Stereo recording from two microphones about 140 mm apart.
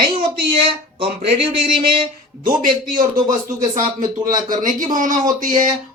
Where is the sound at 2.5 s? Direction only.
75° right (ahead or behind).